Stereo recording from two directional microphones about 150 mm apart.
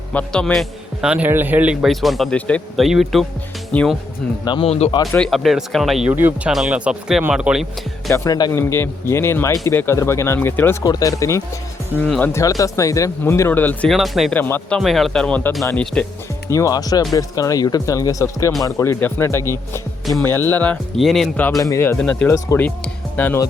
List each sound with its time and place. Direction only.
0.1 s a man's voice: 10° left (ahead or behind)
4.4 s speech: 30° left (ahead or behind)
4.7 s speech: 45° left (ahead or behind)
5.1 s a man's voice: 5° left (ahead or behind)
8.1 s a man's voice: 20° left (ahead or behind)
12.0 s a man's voice: 5° left (ahead or behind)
12.3 s speech: 20° left (ahead or behind)
13.9 s a man's voice: centre (ahead or behind)
14.3 s a man's voice: 10° left (ahead or behind)
14.8 s a man's voice: centre (ahead or behind)
16.5 s a man's voice: 20° left (ahead or behind)
20.5 s a man's voice: 10° left (ahead or behind)
21.6 s a man's voice: 20° left (ahead or behind)